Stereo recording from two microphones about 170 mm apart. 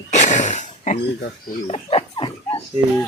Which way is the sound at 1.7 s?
35° left (ahead or behind).